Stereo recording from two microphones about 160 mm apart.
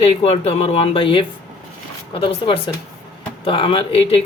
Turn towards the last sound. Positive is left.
turn(degrees=35)  # may be behind; listen again after turning